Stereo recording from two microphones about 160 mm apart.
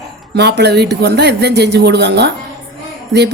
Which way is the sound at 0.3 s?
90° right.